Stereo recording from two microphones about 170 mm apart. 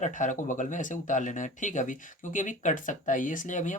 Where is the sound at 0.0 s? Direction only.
50° left (ahead or behind).